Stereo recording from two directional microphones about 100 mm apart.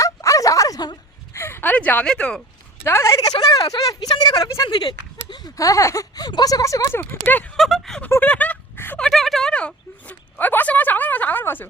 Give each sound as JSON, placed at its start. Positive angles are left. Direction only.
{"t": 0.0, "sound": "bow-wow", "side_deg": 30}
{"t": 1.3, "sound": "speech", "side_deg": 25}
{"t": 2.8, "sound": "speech", "side_deg": 30}
{"t": 3.2, "sound": "speech", "side_deg": 40}
{"t": 4.7, "sound": "speech", "side_deg": 45}
{"t": 5.5, "sound": "speech", "side_deg": 35}
{"t": 7.5, "sound": "speech", "side_deg": 0}
{"t": 8.0, "sound": "a sound", "side_deg": 15}
{"t": 9.0, "sound": "a sound", "side_deg": 0}